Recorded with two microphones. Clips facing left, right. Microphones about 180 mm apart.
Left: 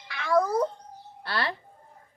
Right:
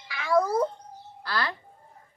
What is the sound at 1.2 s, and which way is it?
Speech, 25° left (ahead or behind).